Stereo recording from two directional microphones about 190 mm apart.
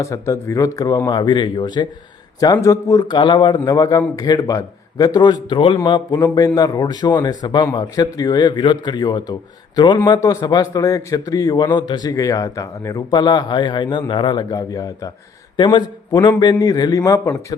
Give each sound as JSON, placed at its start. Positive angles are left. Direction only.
{"t": 0.0, "sound": "a man's voice", "side_deg": 15}